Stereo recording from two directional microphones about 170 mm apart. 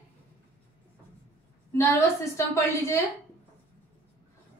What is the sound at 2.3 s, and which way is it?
Speech, 15° left (ahead or behind).